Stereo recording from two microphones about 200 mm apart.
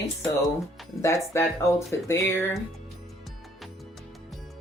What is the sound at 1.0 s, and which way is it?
Speech, 15° left (ahead or behind).